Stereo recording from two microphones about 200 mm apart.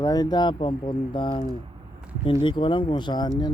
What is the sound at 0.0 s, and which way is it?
Speech, 20° left (ahead or behind).